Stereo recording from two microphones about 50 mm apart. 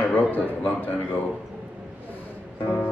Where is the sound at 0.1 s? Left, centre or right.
Left.